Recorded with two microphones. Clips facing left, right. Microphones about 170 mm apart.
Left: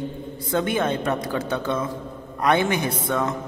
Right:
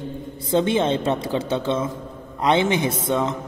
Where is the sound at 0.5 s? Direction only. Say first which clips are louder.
Right 3 dB; 25° right (ahead or behind).